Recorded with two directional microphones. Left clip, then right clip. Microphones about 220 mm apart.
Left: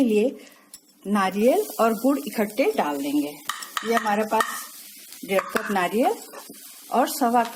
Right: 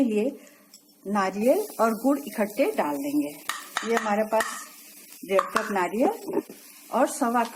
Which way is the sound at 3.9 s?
40° left (ahead or behind).